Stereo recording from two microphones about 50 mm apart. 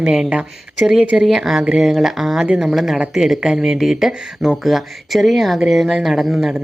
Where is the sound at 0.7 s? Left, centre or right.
Centre.